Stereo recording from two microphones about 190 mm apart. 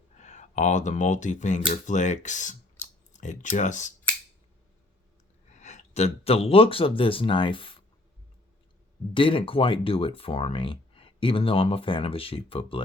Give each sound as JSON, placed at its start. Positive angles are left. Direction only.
{"t": 0.2, "sound": "speech", "side_deg": 40}
{"t": 5.5, "sound": "speech", "side_deg": 40}
{"t": 9.1, "sound": "speech", "side_deg": 25}